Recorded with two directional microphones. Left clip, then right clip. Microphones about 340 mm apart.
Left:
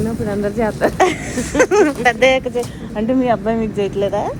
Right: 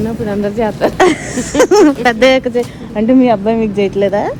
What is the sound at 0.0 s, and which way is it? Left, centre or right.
Speech, right.